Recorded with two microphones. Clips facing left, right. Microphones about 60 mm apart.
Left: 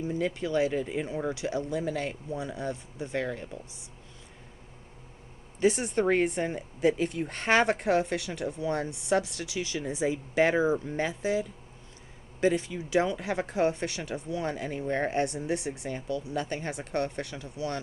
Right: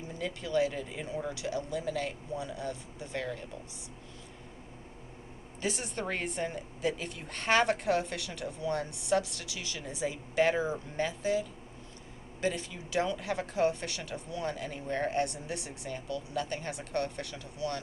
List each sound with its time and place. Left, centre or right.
0.2 s speech: left
5.5 s speech: left